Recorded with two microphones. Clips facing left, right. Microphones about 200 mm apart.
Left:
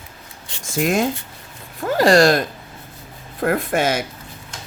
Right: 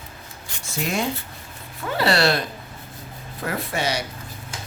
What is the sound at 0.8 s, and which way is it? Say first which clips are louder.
Speech: left 6 dB; 50° left (ahead or behind).